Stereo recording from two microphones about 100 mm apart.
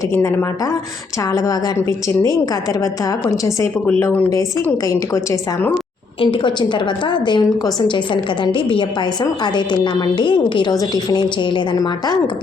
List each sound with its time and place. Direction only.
0.1 s a woman's voice: 25° left (ahead or behind)
6.1 s a woman's voice: 60° left (ahead or behind)